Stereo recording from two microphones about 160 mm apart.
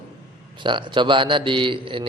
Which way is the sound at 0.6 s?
30° right (ahead or behind).